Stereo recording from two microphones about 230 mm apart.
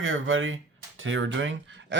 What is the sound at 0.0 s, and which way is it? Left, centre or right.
Speech, right.